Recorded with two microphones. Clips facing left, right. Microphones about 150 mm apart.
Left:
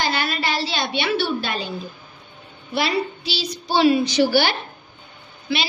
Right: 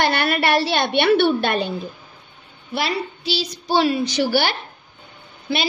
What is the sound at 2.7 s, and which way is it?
A woman's voice, 50° right (ahead or behind).